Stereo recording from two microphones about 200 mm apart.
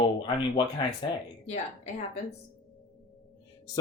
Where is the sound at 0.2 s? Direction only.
25° left (ahead or behind).